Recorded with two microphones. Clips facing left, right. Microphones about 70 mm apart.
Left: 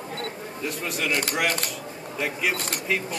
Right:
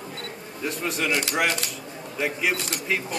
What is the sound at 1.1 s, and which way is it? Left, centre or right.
Speech, left.